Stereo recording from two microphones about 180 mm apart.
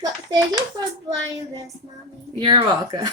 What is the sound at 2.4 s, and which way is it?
Speech, 25° right (ahead or behind).